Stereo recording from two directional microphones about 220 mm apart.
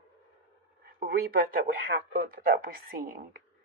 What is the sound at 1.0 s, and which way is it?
Speech, 40° right (ahead or behind).